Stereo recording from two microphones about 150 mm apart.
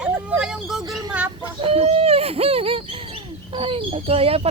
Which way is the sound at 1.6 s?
40° right (ahead or behind).